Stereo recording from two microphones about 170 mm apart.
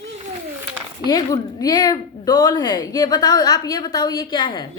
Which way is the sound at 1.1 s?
20° left (ahead or behind).